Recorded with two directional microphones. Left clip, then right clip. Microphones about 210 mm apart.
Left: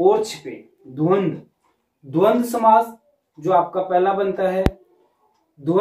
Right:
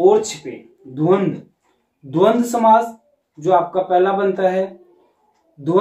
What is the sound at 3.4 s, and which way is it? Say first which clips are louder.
Speech: right 2 dB; 20° right (ahead or behind).